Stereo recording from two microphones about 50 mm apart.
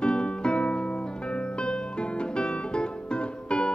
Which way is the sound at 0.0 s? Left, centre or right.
Centre.